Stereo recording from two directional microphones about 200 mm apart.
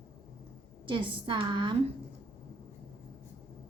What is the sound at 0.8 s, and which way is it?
Speech, 25° right (ahead or behind).